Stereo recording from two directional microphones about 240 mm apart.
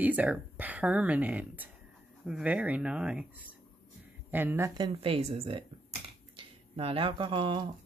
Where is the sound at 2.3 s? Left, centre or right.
Centre.